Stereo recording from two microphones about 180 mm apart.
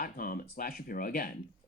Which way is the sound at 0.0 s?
50° left (ahead or behind).